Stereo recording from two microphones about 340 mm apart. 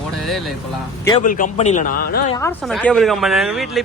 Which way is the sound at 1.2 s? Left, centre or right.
Left.